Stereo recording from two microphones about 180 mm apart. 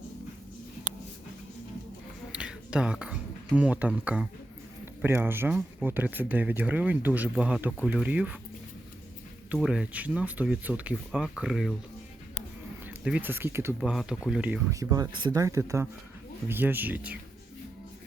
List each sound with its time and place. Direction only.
2.3 s a sound: 5° right (ahead or behind)
5.0 s speech: 10° right (ahead or behind)
9.5 s speech: 5° right (ahead or behind)
12.8 s speech: 10° right (ahead or behind)
13.7 s speech: centre (ahead or behind)
14.7 s speech: 20° right (ahead or behind)